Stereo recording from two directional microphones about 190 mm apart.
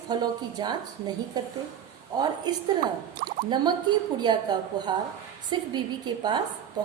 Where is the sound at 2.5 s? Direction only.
20° right (ahead or behind).